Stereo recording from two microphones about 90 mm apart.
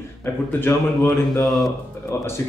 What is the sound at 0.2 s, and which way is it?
Speech, 25° left (ahead or behind).